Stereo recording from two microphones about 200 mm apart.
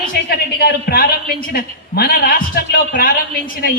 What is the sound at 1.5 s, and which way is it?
A woman's voice, 45° left (ahead or behind).